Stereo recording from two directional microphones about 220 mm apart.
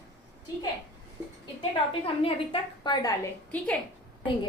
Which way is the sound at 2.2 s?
20° left (ahead or behind).